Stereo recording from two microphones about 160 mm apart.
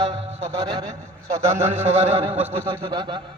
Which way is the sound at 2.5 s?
15° right (ahead or behind).